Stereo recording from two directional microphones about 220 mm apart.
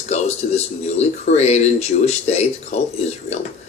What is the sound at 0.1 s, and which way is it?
Speech, 30° left (ahead or behind).